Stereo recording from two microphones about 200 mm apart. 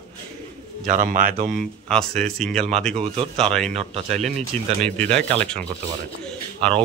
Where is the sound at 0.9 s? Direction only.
40° right (ahead or behind).